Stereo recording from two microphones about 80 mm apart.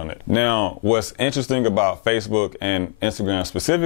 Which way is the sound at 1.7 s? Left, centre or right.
Left.